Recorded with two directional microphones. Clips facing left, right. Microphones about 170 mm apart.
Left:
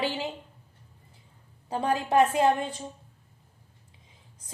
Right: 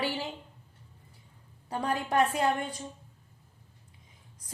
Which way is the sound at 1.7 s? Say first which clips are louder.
Left 4 dB; 25° left (ahead or behind).